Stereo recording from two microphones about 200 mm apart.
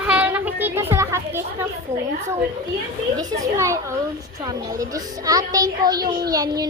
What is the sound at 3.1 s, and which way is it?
A woman's voice, 15° right (ahead or behind).